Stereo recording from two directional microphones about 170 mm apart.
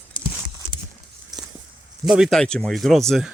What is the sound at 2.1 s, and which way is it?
Speech, centre (ahead or behind).